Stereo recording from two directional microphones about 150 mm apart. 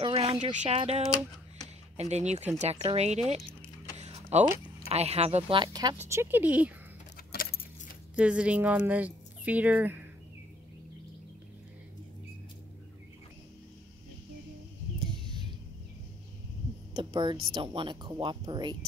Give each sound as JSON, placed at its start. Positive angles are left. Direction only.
{"t": 0.0, "sound": "a sound", "side_deg": -40}
{"t": 0.4, "sound": "speech", "side_deg": -55}
{"t": 4.0, "sound": "mechanisms", "side_deg": -45}
{"t": 4.8, "sound": "speech", "side_deg": -45}
{"t": 6.0, "sound": "speech", "side_deg": -15}
{"t": 8.2, "sound": "speech", "side_deg": -10}
{"t": 16.9, "sound": "a sound", "side_deg": -30}
{"t": 17.6, "sound": "speech", "side_deg": -35}